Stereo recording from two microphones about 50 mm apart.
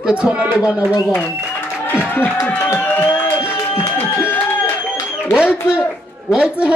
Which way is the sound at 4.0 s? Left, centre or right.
Left.